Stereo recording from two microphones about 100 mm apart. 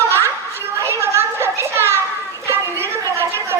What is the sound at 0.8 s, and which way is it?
Children playing, 25° right (ahead or behind).